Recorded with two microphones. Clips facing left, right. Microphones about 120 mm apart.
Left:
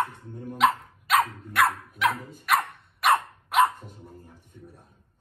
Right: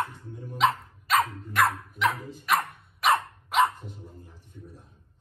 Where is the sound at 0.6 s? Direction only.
Centre (ahead or behind).